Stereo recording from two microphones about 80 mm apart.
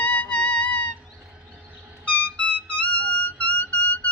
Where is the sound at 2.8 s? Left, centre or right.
Left.